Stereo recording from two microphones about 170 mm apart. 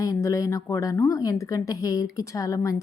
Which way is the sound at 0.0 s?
20° left (ahead or behind).